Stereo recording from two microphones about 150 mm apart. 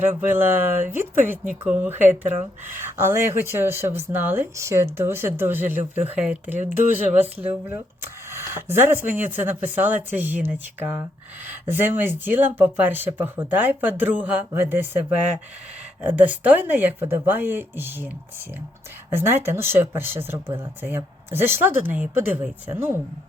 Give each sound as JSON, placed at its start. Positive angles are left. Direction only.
{"t": 0.0, "sound": "speech", "side_deg": -15}
{"t": 16.0, "sound": "speech", "side_deg": -10}
{"t": 19.1, "sound": "speech", "side_deg": -15}